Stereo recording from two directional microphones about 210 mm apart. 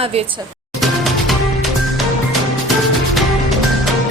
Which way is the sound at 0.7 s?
Centre (ahead or behind).